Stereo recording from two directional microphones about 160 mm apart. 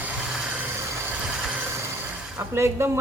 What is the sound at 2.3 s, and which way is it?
Speech, 15° right (ahead or behind).